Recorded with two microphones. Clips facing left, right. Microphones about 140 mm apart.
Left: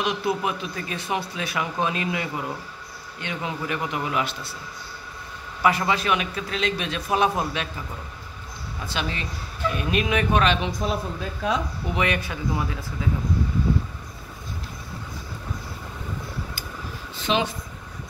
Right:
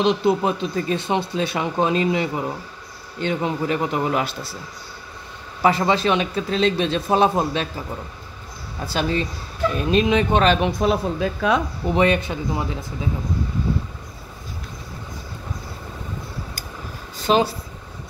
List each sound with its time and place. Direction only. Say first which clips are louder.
0.0 s a man's voice: right 6 dB; 25° right (ahead or behind)
5.6 s a man's voice: right 4 dB; 30° right (ahead or behind)
8.8 s a man's voice: right 7 dB; 35° right (ahead or behind)
10.5 s a woman's voice: right 6 dB; 60° right (ahead or behind); by 11.6 s 75° right (ahead or behind)
11.9 s speech: right 7 dB; 30° right (ahead or behind)
17.2 s speech: right 6 dB; 35° right (ahead or behind)